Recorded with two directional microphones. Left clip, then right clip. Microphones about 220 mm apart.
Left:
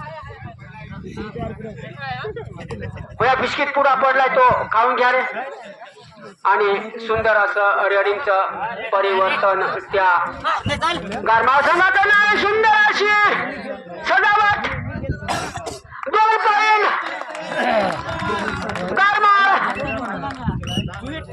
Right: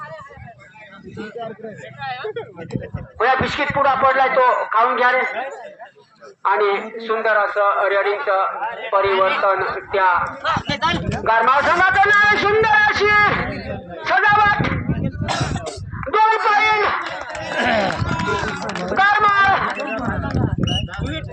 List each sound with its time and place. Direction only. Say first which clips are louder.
2.0 s speech: right 1 dB; 5° left (ahead or behind)
3.2 s a man's voice: even; 45° left (ahead or behind)
5.3 s speech: right 2 dB; 35° right (ahead or behind)
6.4 s a man's voice: left 1 dB; 50° left (ahead or behind)
10.7 s speech: right 1 dB; 15° left (ahead or behind)
11.2 s a man's voice: left 1 dB; 55° left (ahead or behind)
14.0 s a sound: right 1 dB; 55° left (ahead or behind)
15.3 s throat clearing: right 1 dB; 5° left (ahead or behind)
16.0 s a sound: even; 55° left (ahead or behind)
17.6 s run: even; 30° right (ahead or behind)
18.2 s run: right 1 dB; 10° right (ahead or behind)
18.9 s run: even; 55° left (ahead or behind)
20.3 s a sound: right 5 dB; 15° right (ahead or behind)